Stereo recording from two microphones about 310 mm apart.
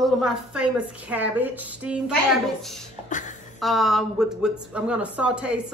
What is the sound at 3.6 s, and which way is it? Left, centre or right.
Speech, centre.